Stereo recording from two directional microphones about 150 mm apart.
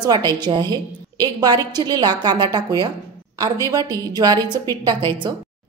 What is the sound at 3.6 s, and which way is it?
Speech, 25° right (ahead or behind).